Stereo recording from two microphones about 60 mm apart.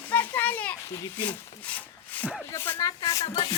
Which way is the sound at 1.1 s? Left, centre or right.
Left.